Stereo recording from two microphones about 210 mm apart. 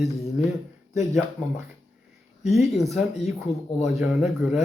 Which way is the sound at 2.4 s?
30° left (ahead or behind).